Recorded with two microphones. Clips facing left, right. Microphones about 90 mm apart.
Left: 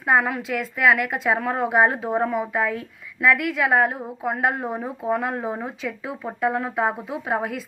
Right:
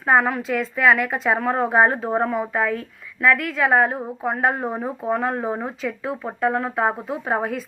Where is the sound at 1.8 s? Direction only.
40° right (ahead or behind).